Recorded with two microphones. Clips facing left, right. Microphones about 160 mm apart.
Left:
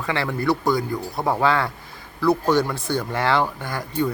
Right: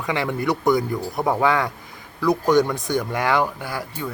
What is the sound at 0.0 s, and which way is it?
A man's voice, 15° right (ahead or behind).